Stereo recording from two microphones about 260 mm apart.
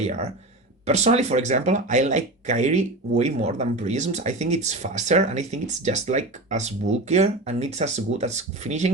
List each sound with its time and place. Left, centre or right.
0.0 s speech: right